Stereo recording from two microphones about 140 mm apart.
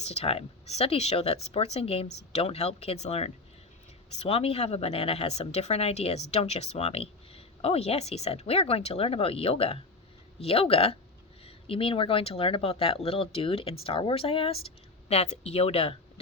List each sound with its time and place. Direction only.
0.0 s speech: 50° left (ahead or behind)